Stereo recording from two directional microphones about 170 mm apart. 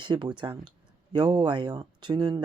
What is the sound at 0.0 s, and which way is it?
Speech, 30° right (ahead or behind).